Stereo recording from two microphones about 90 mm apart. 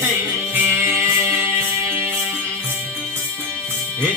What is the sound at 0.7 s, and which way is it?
Music, 30° right (ahead or behind).